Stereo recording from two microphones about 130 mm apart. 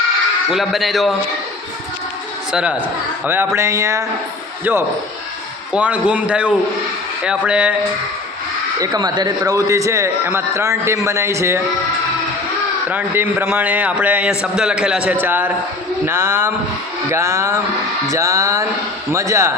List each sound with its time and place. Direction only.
0.5 s a man's voice: centre (ahead or behind)
2.5 s a man's voice: 10° right (ahead or behind)
8.8 s a man's voice: 30° right (ahead or behind)
12.9 s a man's voice: 15° right (ahead or behind)